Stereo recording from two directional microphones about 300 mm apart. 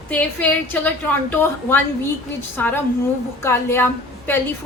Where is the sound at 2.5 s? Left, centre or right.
Centre.